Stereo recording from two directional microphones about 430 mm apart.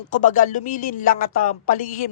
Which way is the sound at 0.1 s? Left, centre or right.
Centre.